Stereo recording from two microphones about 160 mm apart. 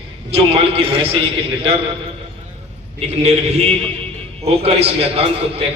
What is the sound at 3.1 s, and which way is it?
A man's voice, 40° right (ahead or behind).